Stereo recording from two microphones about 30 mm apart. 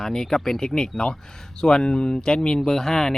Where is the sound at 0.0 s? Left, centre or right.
Centre.